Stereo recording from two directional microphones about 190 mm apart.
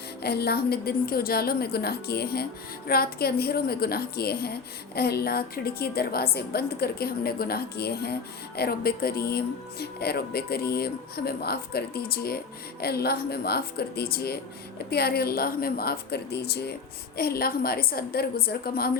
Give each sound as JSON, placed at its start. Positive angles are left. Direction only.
{"t": 0.2, "sound": "a woman's voice", "side_deg": 60}